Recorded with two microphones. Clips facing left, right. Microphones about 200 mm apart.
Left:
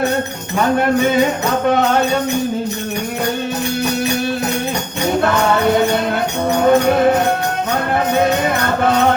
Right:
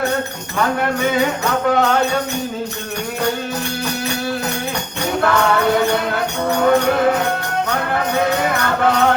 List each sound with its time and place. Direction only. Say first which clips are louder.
1.0 s music: left 3 dB; 25° left (ahead or behind)
5.2 s music: right 1 dB; 25° left (ahead or behind)
6.7 s music: left 3 dB; 20° left (ahead or behind)